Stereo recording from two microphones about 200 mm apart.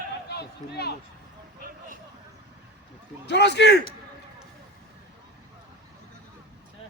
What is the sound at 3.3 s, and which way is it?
Speech, 55° left (ahead or behind).